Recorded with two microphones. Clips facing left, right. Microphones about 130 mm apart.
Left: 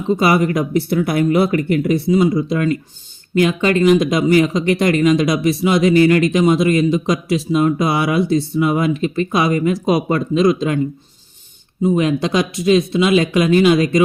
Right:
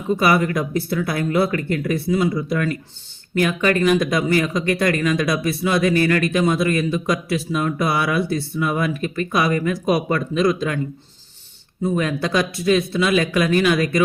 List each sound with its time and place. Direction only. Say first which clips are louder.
0.1 s speech: left 3 dB; 25° left (ahead or behind)
11.8 s speech: left 5 dB; 20° left (ahead or behind)